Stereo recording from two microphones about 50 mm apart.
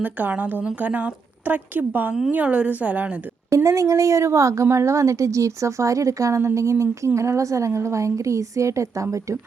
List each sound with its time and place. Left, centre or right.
0.0 s a woman's voice: right
2.3 s a woman's voice: right
3.5 s a woman's voice: right